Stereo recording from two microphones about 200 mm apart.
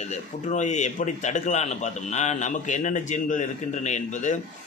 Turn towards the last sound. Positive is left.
turn(degrees=40)  # may be behind; listen again after turning